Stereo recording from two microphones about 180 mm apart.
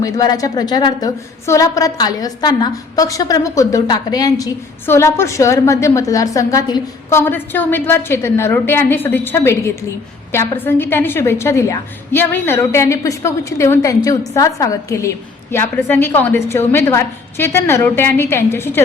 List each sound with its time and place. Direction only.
0.0 s a woman's voice: 20° left (ahead or behind)